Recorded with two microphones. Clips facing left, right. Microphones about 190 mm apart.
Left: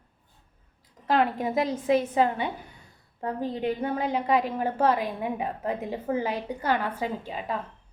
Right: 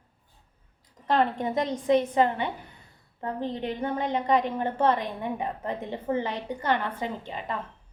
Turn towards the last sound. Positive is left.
turn(degrees=10)  # may be behind; listen again after turning